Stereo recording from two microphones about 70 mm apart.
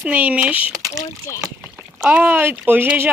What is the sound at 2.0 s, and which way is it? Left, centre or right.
Speech, right.